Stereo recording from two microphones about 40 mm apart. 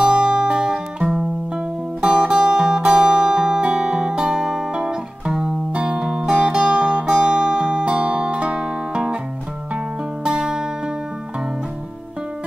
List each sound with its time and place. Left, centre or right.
0.0 s music: centre
2.0 s music: right
4.7 s guitar: right
5.4 s music: right
10.2 s music: centre